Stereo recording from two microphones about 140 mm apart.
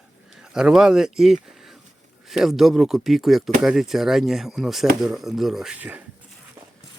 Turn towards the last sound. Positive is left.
turn(degrees=-10)  # may be behind; listen again after turning